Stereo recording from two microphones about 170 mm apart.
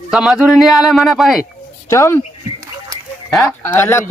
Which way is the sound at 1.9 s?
15° left (ahead or behind).